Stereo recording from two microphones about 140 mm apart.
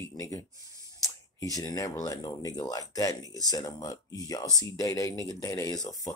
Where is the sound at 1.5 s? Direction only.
25° left (ahead or behind).